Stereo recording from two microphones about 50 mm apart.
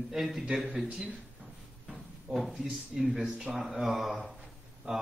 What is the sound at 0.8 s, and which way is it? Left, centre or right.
Speech, right.